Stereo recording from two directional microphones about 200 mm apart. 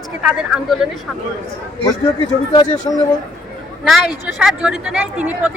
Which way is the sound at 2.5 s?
20° left (ahead or behind).